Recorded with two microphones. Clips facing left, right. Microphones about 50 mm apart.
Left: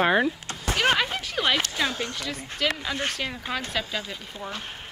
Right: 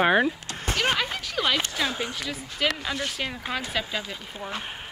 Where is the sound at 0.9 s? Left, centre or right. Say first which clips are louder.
Left 2 dB; centre.